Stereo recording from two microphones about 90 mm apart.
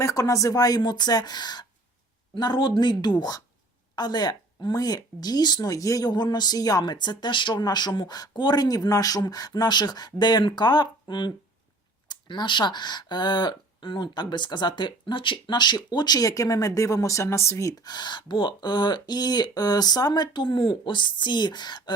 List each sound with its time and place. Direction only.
0.0 s speech: 35° left (ahead or behind)
17.8 s speech: 55° left (ahead or behind)